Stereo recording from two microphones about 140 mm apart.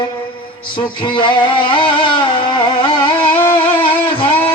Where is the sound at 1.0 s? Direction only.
35° left (ahead or behind).